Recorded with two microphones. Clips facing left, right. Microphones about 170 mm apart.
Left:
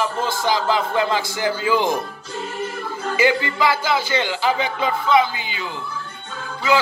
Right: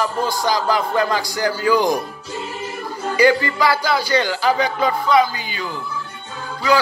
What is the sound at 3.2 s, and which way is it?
Speech, 20° left (ahead or behind).